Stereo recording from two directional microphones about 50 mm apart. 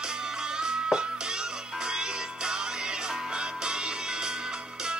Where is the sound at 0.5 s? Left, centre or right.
Centre.